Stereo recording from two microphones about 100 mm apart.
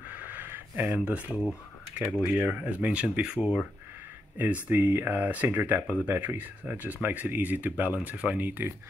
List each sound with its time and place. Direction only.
0.1 s a sound: 15° right (ahead or behind)
2.2 s speech: 15° right (ahead or behind)
4.6 s speech: 20° right (ahead or behind)